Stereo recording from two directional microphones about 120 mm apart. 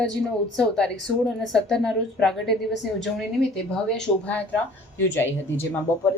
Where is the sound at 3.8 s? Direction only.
5° left (ahead or behind).